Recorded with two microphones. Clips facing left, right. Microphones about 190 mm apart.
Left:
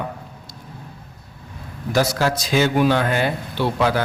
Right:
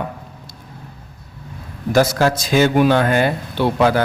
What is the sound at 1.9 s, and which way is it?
Speech, 50° right (ahead or behind).